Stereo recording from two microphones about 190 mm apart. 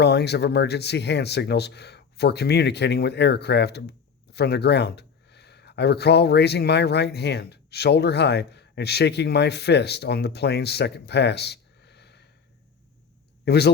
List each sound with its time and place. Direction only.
0.0 s speech: 60° left (ahead or behind)
13.4 s a man's voice: 60° left (ahead or behind)